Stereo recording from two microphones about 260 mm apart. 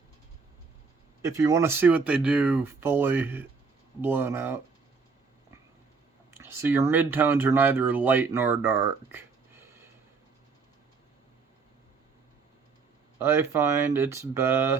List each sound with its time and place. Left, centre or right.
1.2 s speech: centre
6.3 s speech: centre
13.1 s speech: centre